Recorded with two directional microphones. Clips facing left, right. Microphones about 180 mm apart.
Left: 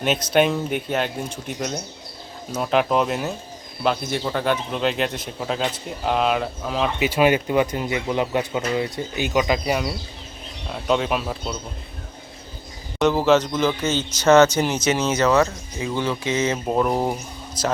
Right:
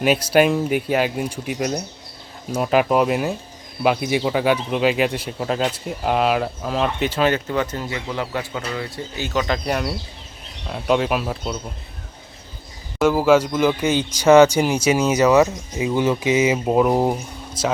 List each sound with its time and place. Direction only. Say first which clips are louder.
0.0 s speech: right 3 dB; 5° right (ahead or behind)
7.1 s speech: left 2 dB; 10° left (ahead or behind)
13.0 s speech: right 2 dB; 10° right (ahead or behind)